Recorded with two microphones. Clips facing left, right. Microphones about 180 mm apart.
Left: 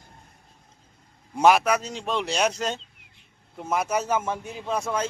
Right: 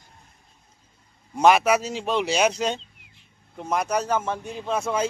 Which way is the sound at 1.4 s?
Centre (ahead or behind).